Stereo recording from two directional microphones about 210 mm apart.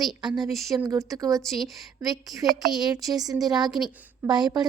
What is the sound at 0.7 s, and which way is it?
Speech, 15° right (ahead or behind).